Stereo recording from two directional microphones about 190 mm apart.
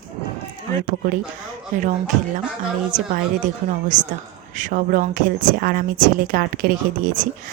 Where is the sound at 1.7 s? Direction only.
45° right (ahead or behind).